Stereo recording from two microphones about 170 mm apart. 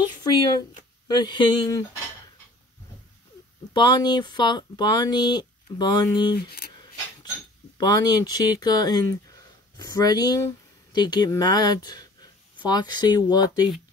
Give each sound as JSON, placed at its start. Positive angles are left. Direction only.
{"t": 0.2, "sound": "speech", "side_deg": 25}
{"t": 3.7, "sound": "speech", "side_deg": 25}
{"t": 6.3, "sound": "speech", "side_deg": 70}
{"t": 7.7, "sound": "speech", "side_deg": 25}